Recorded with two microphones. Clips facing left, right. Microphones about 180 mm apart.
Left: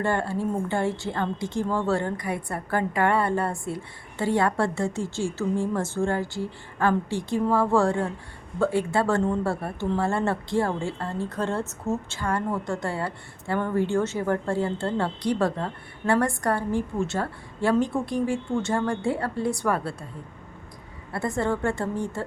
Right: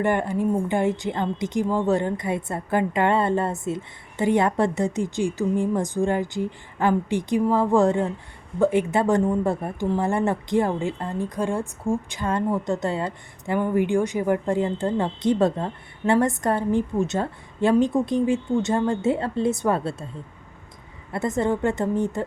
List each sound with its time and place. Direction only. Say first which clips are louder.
0.0 s a woman's voice: right 3 dB; 15° right (ahead or behind)
21.1 s speech: right 3 dB; 20° right (ahead or behind)